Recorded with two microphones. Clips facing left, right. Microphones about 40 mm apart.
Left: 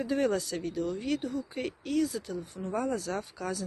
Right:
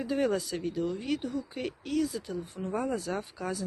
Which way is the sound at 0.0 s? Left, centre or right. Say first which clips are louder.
Even; centre.